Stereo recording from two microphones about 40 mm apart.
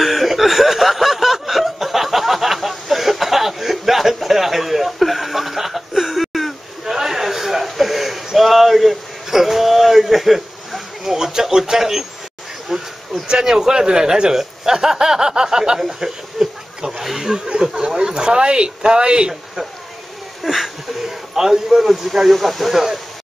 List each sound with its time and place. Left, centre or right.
0.0 s snicker: centre
7.0 s a sound: centre
13.3 s a man's voice: centre
15.8 s a sound: centre
17.5 s speech: centre
20.4 s a man's voice: centre
22.3 s speech: centre